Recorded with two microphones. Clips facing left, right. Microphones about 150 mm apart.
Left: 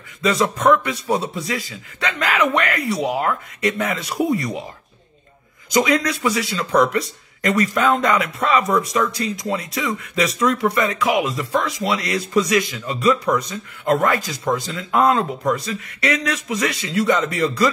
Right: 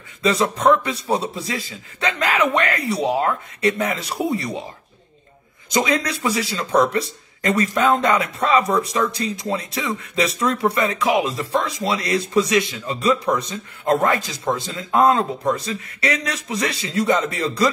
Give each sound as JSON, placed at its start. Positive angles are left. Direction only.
{"t": 0.2, "sound": "a man's voice", "side_deg": -30}
{"t": 5.7, "sound": "a man's voice", "side_deg": -25}